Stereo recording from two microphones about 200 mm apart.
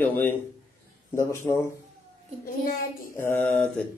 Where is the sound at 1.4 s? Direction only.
10° left (ahead or behind).